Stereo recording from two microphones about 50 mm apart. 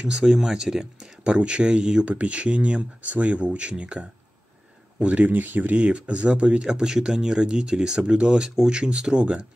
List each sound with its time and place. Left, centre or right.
0.0 s speech: centre; by 5.8 s right
5.8 s speech: right